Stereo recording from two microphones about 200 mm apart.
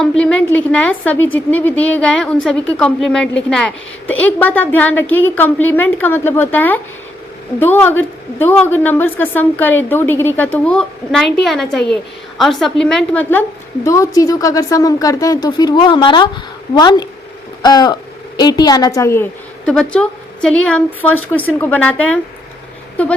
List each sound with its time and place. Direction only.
0.0 s a woman's voice: 5° left (ahead or behind)
13.8 s a woman's voice: 15° left (ahead or behind)